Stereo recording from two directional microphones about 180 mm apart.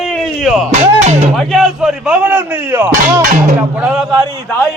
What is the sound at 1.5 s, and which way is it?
Speech, centre (ahead or behind).